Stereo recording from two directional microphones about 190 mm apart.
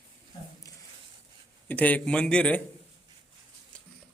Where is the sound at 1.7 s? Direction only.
10° left (ahead or behind).